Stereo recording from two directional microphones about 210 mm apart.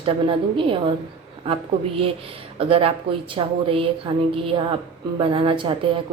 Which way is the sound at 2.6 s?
25° right (ahead or behind).